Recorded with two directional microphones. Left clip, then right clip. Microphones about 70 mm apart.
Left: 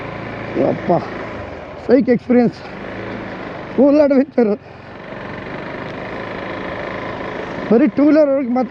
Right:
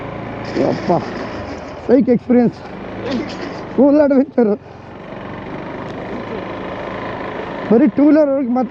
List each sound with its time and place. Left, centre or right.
0.5 s speech: left
3.8 s speech: left
6.1 s vehicle: left
7.8 s speech: left